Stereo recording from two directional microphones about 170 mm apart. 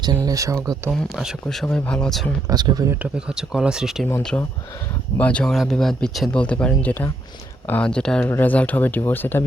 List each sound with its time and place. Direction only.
0.3 s speech: 20° right (ahead or behind)
0.9 s speech: centre (ahead or behind)
2.5 s speech: 25° right (ahead or behind)
3.2 s speech: 5° right (ahead or behind); by 9.4 s 10° left (ahead or behind)